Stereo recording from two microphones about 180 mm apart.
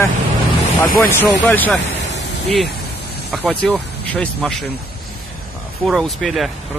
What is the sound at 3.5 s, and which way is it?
Speech, 5° left (ahead or behind).